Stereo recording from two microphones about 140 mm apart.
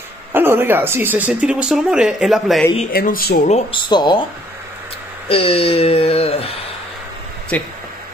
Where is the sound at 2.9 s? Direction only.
90° left.